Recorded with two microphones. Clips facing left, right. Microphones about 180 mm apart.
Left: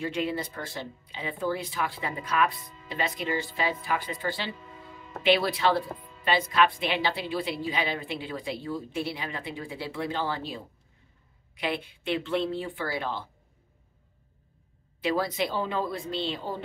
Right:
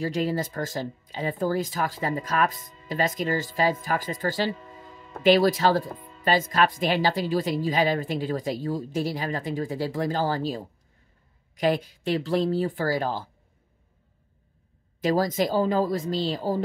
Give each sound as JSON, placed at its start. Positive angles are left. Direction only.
{"t": 0.0, "sound": "speech", "side_deg": -40}
{"t": 15.0, "sound": "speech", "side_deg": -40}